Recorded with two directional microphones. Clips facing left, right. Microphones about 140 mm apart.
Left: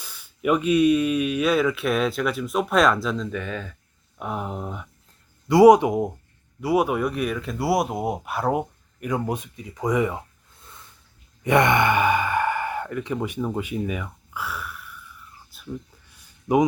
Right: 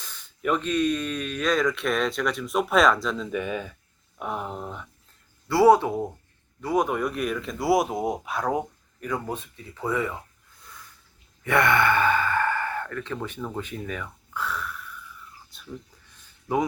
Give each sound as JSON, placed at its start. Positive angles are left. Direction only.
{"t": 0.0, "sound": "speech", "side_deg": 10}
{"t": 3.2, "sound": "speech", "side_deg": -10}
{"t": 4.2, "sound": "speech", "side_deg": 0}
{"t": 11.4, "sound": "speech", "side_deg": 20}
{"t": 15.4, "sound": "a sound", "side_deg": 5}
{"t": 16.1, "sound": "a sound", "side_deg": 15}